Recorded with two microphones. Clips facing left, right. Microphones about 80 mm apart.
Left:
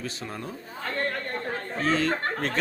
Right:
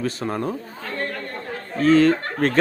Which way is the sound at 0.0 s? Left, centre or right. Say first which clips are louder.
Right 10 dB; right.